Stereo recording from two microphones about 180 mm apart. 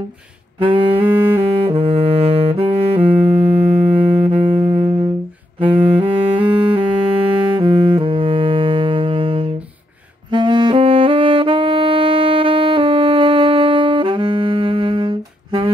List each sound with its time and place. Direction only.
0.6 s saxophone: 30° right (ahead or behind)
3.1 s music: 35° right (ahead or behind)
5.6 s saxophone: 30° right (ahead or behind)
7.5 s music: 30° right (ahead or behind)
10.3 s saxophone: 25° right (ahead or behind)